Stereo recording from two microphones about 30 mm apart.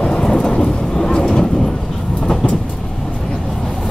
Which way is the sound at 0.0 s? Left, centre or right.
Left.